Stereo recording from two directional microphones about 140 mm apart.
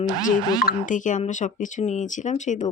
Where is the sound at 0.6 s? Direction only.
65° left (ahead or behind).